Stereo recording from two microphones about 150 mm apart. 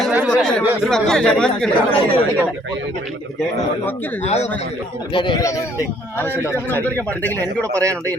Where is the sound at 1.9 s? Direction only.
35° left (ahead or behind).